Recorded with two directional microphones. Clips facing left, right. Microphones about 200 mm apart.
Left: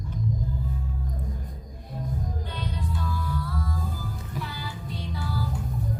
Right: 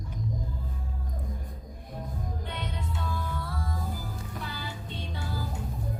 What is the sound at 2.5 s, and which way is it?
Music, 25° right (ahead or behind).